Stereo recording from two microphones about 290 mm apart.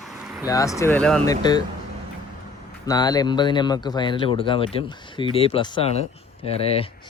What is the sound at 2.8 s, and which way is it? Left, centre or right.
Speech, centre.